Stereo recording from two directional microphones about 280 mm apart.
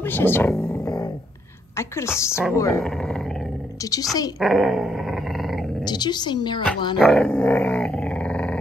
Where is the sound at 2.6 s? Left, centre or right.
Centre.